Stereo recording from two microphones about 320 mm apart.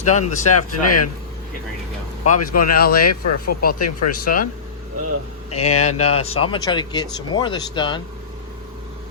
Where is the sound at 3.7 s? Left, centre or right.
Left.